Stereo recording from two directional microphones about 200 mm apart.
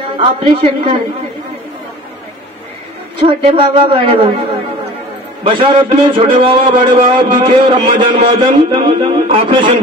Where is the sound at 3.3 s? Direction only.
25° right (ahead or behind).